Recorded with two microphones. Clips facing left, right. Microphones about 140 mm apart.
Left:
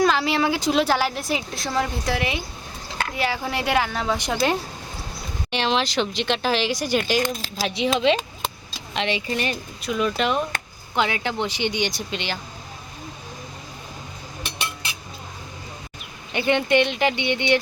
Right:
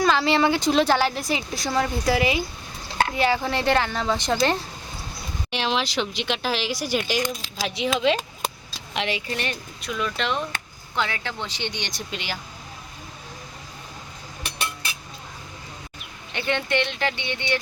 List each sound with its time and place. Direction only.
0.0 s a woman's voice: 5° left (ahead or behind)
5.5 s a woman's voice: 5° right (ahead or behind)
16.3 s speech: 15° left (ahead or behind)